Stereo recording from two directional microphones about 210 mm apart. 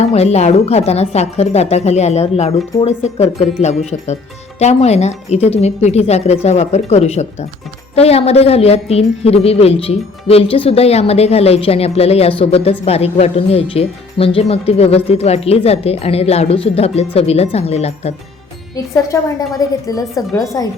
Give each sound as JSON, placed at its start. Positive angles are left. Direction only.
{"t": 0.0, "sound": "a woman's voice", "side_deg": 30}
{"t": 19.0, "sound": "a woman's voice", "side_deg": 15}